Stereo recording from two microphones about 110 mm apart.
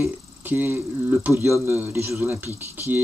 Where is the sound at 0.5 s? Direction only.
15° right (ahead or behind).